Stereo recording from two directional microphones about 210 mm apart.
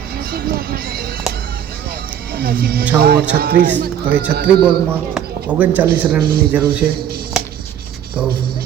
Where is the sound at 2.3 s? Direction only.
45° right (ahead or behind).